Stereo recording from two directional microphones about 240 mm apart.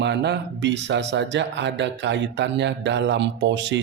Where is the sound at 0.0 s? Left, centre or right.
Right.